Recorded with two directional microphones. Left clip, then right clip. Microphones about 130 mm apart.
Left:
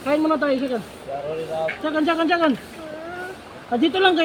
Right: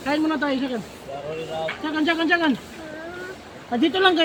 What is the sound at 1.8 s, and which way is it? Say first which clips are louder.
Speech: left 1 dB; 30° right (ahead or behind).